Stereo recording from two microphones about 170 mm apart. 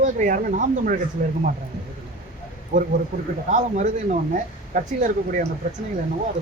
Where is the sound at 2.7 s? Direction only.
45° right (ahead or behind).